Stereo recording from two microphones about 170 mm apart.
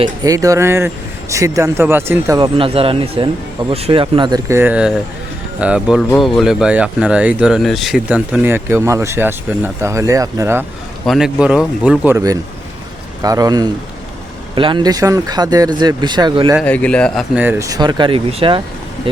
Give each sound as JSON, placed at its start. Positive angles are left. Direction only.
{"t": 0.0, "sound": "speech", "side_deg": -20}
{"t": 2.6, "sound": "speech", "side_deg": -35}
{"t": 4.4, "sound": "speech", "side_deg": -10}
{"t": 11.0, "sound": "speech", "side_deg": 0}
{"t": 12.1, "sound": "speech", "side_deg": -20}
{"t": 16.6, "sound": "speech", "side_deg": 10}
{"t": 17.3, "sound": "speech", "side_deg": -10}